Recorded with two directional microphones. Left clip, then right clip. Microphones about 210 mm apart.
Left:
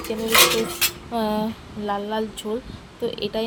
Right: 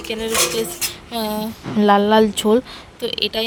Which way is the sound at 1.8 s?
50° right (ahead or behind).